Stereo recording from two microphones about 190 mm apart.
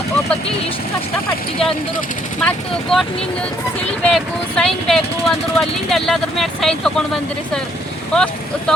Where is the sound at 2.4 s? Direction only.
5° left (ahead or behind).